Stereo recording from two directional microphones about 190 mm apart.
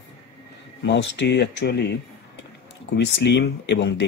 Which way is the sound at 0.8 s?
70° left (ahead or behind).